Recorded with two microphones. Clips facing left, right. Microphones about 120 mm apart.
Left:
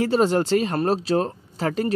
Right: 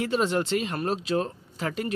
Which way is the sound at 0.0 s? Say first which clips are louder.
Left 6 dB; 35° left (ahead or behind).